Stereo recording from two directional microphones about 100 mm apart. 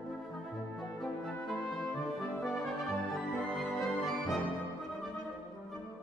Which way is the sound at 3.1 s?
Centre (ahead or behind).